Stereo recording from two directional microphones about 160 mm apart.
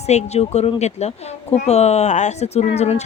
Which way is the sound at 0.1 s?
45° left (ahead or behind).